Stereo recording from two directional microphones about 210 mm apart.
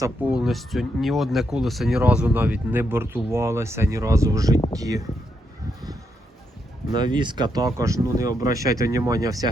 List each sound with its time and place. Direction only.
0.0 s speech: 5° right (ahead or behind)
6.9 s speech: 20° right (ahead or behind)